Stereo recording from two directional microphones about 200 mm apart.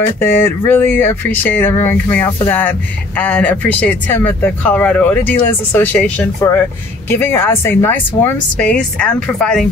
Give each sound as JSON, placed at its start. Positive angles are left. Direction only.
{"t": 0.2, "sound": "speech", "side_deg": 10}